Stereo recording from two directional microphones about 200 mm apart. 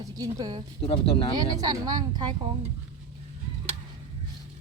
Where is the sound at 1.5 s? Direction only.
20° right (ahead or behind).